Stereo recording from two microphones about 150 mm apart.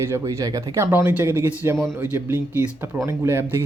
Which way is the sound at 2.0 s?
15° right (ahead or behind).